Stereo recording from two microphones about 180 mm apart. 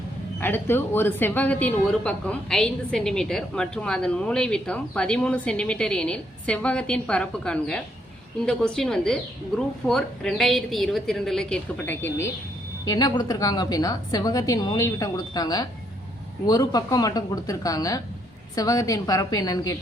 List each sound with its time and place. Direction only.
0.3 s a woman's voice: 10° left (ahead or behind)